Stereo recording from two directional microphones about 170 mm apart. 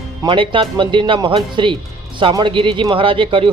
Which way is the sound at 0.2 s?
30° right (ahead or behind).